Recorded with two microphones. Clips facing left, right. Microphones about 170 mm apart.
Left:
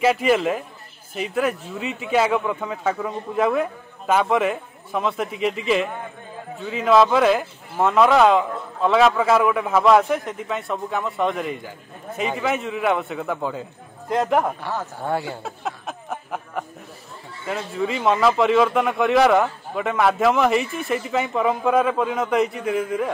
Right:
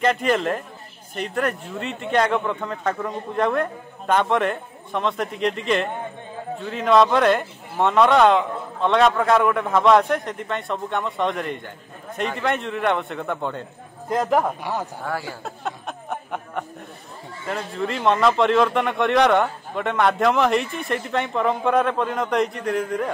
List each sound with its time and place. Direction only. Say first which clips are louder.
0.0 s a man's voice: left 2 dB; 5° left (ahead or behind)
14.6 s speech: right 1 dB; 15° right (ahead or behind)
15.0 s speech: left 7 dB; 25° left (ahead or behind)
15.4 s a sound: even; centre (ahead or behind)
17.5 s a man's voice: left 2 dB; 5° left (ahead or behind)